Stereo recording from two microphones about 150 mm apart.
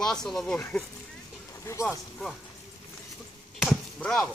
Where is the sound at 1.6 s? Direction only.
20° left (ahead or behind).